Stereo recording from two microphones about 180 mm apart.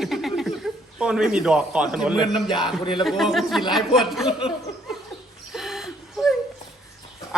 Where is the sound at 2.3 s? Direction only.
25° left (ahead or behind).